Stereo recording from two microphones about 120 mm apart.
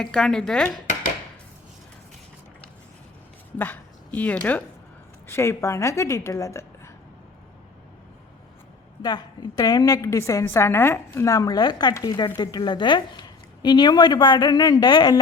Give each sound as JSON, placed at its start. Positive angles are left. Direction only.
{"t": 0.0, "sound": "dishes", "side_deg": 5}
{"t": 3.6, "sound": "a woman's voice", "side_deg": 15}
{"t": 9.0, "sound": "a woman's voice", "side_deg": 35}